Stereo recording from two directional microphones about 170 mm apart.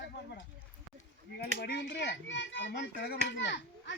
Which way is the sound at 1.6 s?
80° left.